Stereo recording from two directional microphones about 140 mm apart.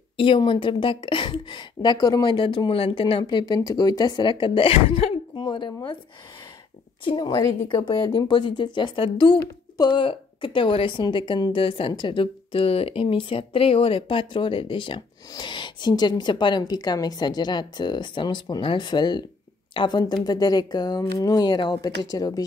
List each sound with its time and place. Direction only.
0.2 s a woman's voice: 40° left (ahead or behind)
5.4 s a woman's voice: 35° left (ahead or behind)
7.1 s a woman's voice: 30° left (ahead or behind)